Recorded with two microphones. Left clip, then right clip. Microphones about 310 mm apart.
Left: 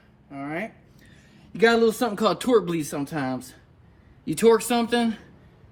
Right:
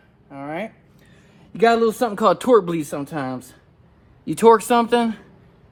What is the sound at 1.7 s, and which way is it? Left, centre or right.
Speech, centre.